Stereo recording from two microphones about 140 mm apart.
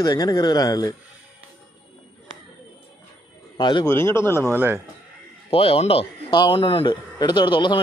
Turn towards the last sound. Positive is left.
turn(degrees=35)  # may be behind; listen again after turning